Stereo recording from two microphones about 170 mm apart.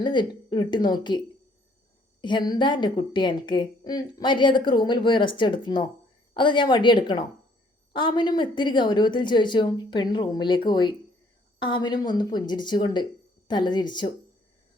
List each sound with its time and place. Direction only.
0.0 s a woman's voice: 25° left (ahead or behind)
2.2 s a woman's voice: 25° left (ahead or behind)